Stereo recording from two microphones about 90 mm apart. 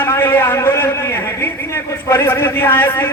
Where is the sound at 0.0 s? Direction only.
25° left (ahead or behind).